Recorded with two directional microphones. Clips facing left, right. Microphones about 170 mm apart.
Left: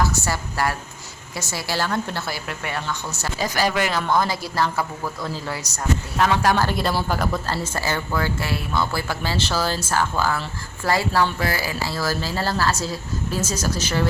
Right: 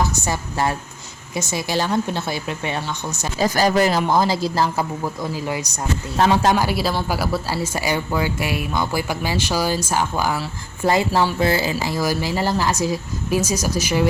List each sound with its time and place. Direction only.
0.0 s a woman's voice: 20° right (ahead or behind)
3.5 s speech: 40° right (ahead or behind); by 5.8 s 15° right (ahead or behind)
6.1 s speech: 30° right (ahead or behind)
6.5 s speech: 10° right (ahead or behind)